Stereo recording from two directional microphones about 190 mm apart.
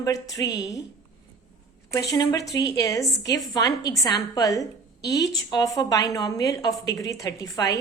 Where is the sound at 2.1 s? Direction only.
20° left (ahead or behind).